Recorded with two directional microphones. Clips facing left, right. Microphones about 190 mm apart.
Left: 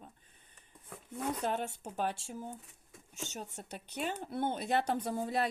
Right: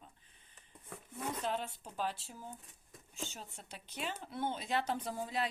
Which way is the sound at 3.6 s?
50° left (ahead or behind).